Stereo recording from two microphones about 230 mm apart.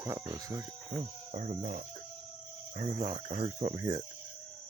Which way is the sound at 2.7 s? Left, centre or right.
Right.